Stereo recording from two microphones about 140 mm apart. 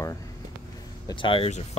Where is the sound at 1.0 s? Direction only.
35° left (ahead or behind).